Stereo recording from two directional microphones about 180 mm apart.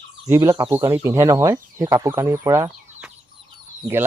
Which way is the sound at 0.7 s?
15° right (ahead or behind).